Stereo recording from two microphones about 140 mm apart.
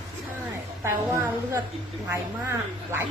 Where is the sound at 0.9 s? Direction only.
20° right (ahead or behind).